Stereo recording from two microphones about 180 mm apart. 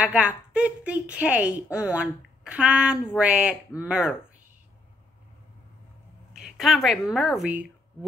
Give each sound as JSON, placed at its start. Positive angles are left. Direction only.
{"t": 0.0, "sound": "a woman's voice", "side_deg": -5}
{"t": 6.3, "sound": "a woman's voice", "side_deg": 0}